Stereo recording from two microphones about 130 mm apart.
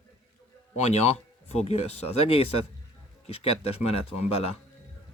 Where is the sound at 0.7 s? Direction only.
55° left (ahead or behind).